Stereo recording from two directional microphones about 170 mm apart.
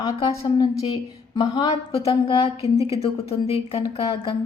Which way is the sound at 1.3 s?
25° left (ahead or behind).